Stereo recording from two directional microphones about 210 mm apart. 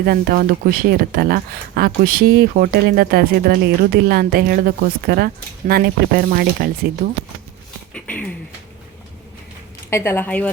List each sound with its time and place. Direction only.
0.0 s speech: 45° right (ahead or behind)
7.9 s a sound: 5° left (ahead or behind)
9.9 s speech: 10° left (ahead or behind)